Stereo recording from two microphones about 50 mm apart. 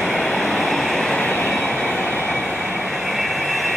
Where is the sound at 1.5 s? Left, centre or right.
Centre.